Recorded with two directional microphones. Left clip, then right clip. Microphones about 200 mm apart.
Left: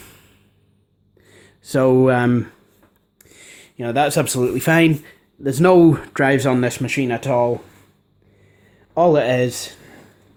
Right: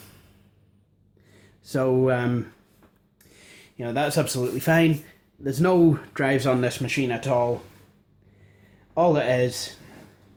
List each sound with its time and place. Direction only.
1.2 s speech: 40° left (ahead or behind)
9.0 s speech: 45° left (ahead or behind)